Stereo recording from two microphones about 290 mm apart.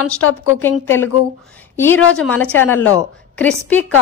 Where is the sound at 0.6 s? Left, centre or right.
Centre.